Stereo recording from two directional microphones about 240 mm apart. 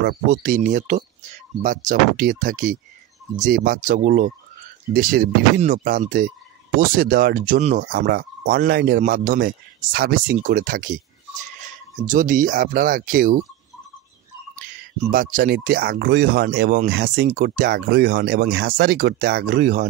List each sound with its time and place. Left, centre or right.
0.0 s speech: right
15.0 s speech: right